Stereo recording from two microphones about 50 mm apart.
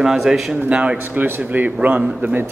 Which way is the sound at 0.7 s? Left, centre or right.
Right.